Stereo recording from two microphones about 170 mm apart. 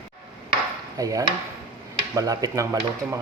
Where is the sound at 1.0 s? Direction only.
20° right (ahead or behind).